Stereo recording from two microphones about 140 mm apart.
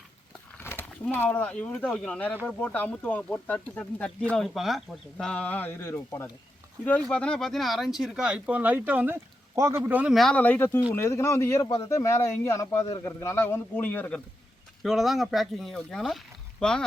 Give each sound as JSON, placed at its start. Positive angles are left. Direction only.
{"t": 0.6, "sound": "a sound", "side_deg": 15}
{"t": 1.1, "sound": "speech", "side_deg": 15}
{"t": 7.0, "sound": "speech", "side_deg": 5}
{"t": 14.8, "sound": "speech", "side_deg": 0}